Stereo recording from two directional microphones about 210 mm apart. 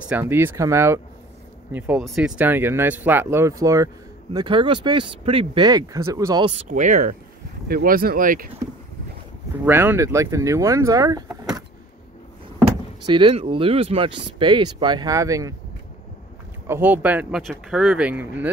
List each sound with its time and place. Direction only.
0.1 s speech: 10° right (ahead or behind)
6.5 s speech: 35° right (ahead or behind)
9.7 s speech: 10° right (ahead or behind)
13.0 s speech: 25° right (ahead or behind)
16.6 s speech: 10° right (ahead or behind)